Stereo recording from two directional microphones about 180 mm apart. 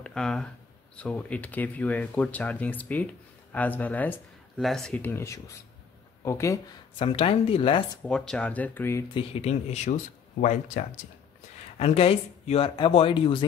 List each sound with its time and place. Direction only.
0.0 s speech: 5° left (ahead or behind)
7.0 s speech: 30° left (ahead or behind)
8.0 s speech: 5° left (ahead or behind)
9.1 s speech: 35° left (ahead or behind)
11.8 s speech: 35° left (ahead or behind)